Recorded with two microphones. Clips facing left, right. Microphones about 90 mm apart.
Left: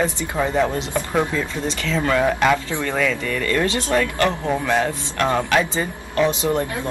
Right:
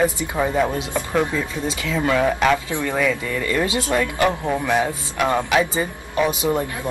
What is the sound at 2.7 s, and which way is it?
Speech, 15° right (ahead or behind).